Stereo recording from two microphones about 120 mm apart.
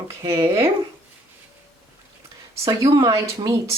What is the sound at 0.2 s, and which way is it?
Speech, 40° right (ahead or behind).